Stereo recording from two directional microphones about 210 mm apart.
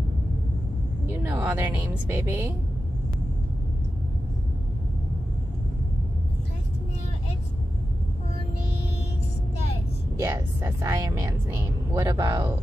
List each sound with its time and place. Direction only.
1.0 s a woman's voice: 10° right (ahead or behind)
10.1 s a woman's voice: 15° right (ahead or behind)